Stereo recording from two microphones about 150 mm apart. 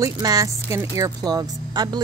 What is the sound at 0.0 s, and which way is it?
Speech, 25° right (ahead or behind).